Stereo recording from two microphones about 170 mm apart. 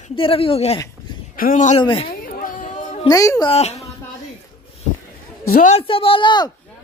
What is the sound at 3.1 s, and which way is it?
Speech, 20° left (ahead or behind).